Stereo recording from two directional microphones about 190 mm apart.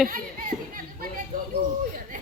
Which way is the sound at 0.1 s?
45° right (ahead or behind).